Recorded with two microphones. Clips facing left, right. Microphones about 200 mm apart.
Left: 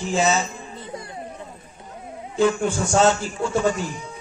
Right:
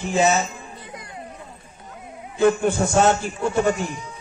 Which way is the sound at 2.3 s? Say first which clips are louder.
Right 2 dB; 55° right (ahead or behind).